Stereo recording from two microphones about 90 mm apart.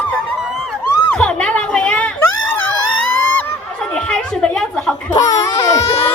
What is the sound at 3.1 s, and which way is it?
Goose, 20° left (ahead or behind).